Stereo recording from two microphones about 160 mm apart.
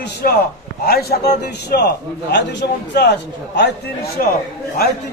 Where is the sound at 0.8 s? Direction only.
75° left (ahead or behind).